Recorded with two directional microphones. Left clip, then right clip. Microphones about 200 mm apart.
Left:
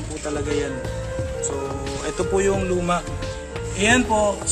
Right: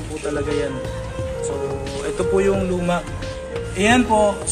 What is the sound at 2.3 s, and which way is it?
Speech, 45° left (ahead or behind).